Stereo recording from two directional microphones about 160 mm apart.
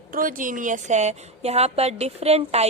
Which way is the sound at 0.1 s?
60° right (ahead or behind).